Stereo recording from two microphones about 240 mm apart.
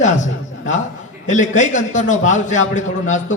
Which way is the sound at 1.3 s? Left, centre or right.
Left.